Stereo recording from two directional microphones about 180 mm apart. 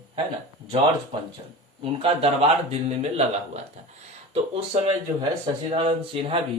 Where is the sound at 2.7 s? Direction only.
35° right (ahead or behind).